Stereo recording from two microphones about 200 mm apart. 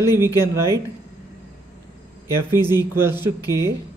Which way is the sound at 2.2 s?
10° right (ahead or behind).